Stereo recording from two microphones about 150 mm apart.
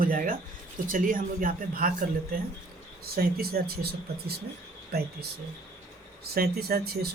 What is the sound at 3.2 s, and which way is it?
Speech, 90° right.